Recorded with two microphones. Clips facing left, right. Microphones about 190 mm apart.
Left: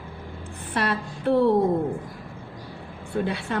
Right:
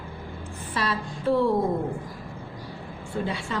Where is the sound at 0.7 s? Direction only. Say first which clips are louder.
Left 3 dB; 55° left (ahead or behind).